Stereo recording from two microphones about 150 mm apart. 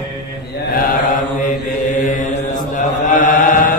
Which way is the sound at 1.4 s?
55° left (ahead or behind).